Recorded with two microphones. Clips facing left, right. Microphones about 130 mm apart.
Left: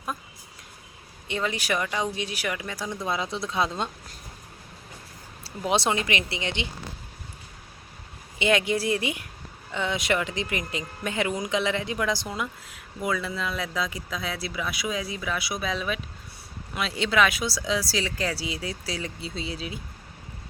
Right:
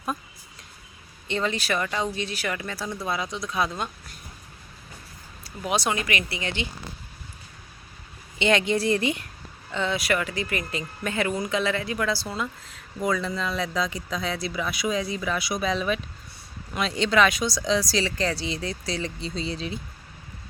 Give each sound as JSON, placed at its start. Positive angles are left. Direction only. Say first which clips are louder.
{"t": 1.3, "sound": "speech", "louder": "right 1 dB", "side_deg": 10}
{"t": 5.4, "sound": "speech", "louder": "left 2 dB", "side_deg": 25}
{"t": 8.4, "sound": "speech", "louder": "right 1 dB", "side_deg": 10}